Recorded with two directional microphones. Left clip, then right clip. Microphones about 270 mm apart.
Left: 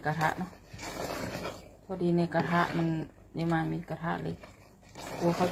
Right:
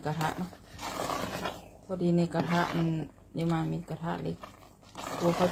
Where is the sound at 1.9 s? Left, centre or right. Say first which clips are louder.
Even; centre.